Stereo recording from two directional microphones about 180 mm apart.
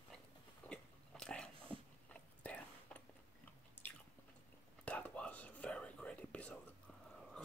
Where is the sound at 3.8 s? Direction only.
10° left (ahead or behind).